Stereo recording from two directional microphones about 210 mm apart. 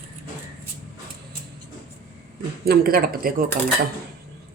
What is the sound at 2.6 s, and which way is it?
Speech, 50° right (ahead or behind).